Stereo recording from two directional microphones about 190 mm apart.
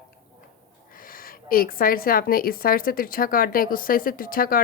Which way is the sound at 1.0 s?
50° left (ahead or behind).